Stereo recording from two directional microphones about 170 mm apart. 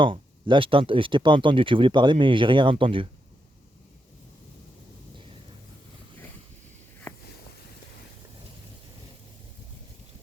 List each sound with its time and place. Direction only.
0.0 s speech: 30° right (ahead or behind)